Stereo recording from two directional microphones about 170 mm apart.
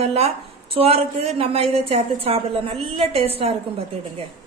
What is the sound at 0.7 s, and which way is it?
A woman's voice, 35° right (ahead or behind).